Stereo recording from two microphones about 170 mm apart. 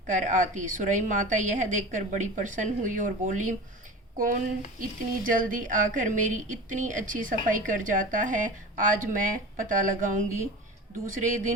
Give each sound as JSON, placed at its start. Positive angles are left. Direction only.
{"t": 0.1, "sound": "a woman's voice", "side_deg": -50}